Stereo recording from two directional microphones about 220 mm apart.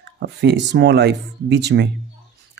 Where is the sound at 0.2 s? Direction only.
50° right (ahead or behind).